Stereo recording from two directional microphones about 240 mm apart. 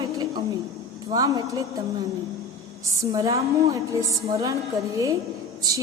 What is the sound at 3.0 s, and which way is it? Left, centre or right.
A woman's voice, centre.